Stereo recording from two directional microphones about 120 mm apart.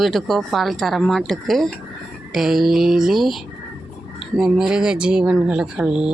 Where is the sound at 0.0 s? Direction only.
Centre (ahead or behind).